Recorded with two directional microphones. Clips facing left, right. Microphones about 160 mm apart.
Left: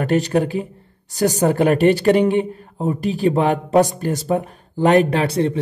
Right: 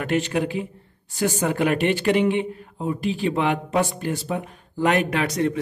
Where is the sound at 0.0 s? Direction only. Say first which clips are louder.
Left 5 dB; 40° left (ahead or behind).